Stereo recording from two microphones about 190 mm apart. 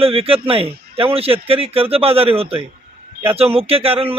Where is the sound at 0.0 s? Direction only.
30° right (ahead or behind).